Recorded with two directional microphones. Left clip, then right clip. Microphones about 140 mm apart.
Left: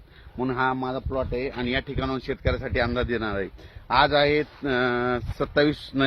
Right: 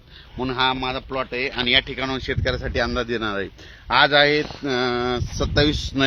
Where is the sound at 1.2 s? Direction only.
20° right (ahead or behind); by 3.9 s 70° right (ahead or behind).